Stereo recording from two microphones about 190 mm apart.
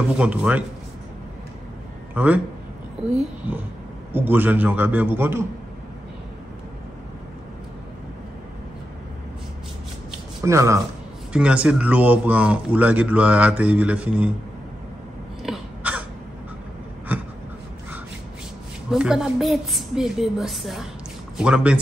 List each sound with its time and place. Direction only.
0.2 s a man's voice: 5° right (ahead or behind)
2.1 s a man's voice: 10° right (ahead or behind)
4.1 s a man's voice: 10° right (ahead or behind)
10.4 s a man's voice: 15° right (ahead or behind)
15.4 s caw: 5° right (ahead or behind)
18.9 s a woman's voice: 5° right (ahead or behind)